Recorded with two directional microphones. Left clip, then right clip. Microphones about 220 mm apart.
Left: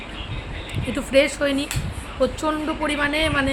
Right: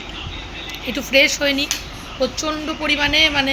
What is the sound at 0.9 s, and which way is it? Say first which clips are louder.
A woman's voice: right 3 dB; 15° left (ahead or behind).